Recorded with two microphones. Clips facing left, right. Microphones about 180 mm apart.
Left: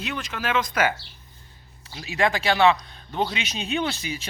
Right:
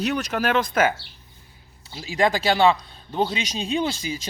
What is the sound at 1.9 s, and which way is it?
Speech, 30° right (ahead or behind).